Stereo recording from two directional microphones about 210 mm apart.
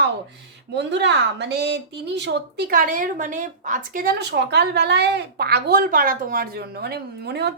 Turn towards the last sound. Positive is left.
turn(degrees=-50)  # may be behind; listen again after turning